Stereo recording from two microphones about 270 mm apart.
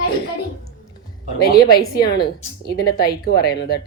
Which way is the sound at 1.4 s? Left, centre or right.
Left.